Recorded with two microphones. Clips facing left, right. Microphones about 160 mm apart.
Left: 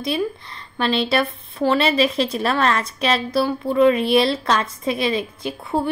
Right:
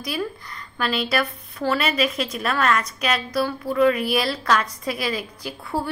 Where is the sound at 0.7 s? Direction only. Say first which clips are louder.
Left 4 dB; 25° left (ahead or behind).